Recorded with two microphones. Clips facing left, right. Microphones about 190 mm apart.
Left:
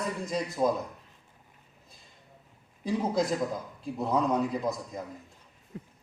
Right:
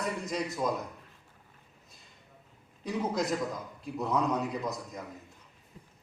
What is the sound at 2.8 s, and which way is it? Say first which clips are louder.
A man's voice: left 3 dB; 30° left (ahead or behind).